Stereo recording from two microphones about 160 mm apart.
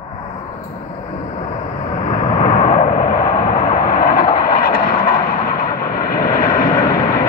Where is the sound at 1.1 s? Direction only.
50° left (ahead or behind).